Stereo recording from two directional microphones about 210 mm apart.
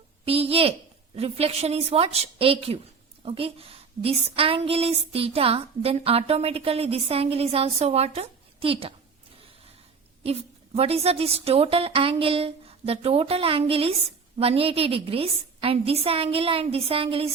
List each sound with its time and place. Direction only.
0.3 s a woman's voice: 30° right (ahead or behind)
10.2 s a woman's voice: 30° right (ahead or behind)